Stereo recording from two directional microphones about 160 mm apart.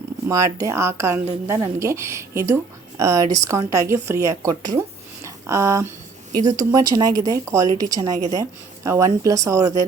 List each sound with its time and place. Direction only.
0.3 s a woman's voice: 20° right (ahead or behind)